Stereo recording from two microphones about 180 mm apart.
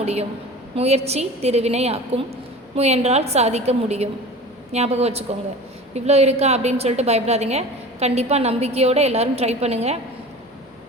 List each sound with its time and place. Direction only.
0.0 s a woman's voice: 35° right (ahead or behind)